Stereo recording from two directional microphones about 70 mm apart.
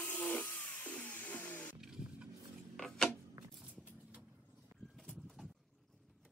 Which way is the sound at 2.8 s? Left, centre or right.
Centre.